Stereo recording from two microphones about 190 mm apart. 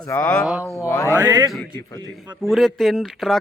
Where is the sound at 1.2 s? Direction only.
20° right (ahead or behind).